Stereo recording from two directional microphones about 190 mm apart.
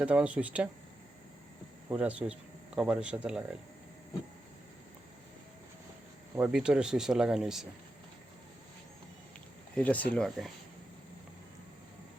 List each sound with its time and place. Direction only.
0.0 s speech: 5° right (ahead or behind)
1.9 s speech: 5° right (ahead or behind)
6.3 s speech: 5° right (ahead or behind)
9.7 s speech: 10° left (ahead or behind)